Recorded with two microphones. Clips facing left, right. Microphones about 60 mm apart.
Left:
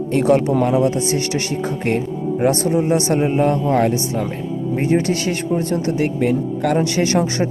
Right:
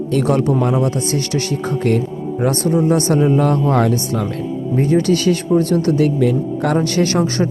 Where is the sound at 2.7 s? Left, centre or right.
Right.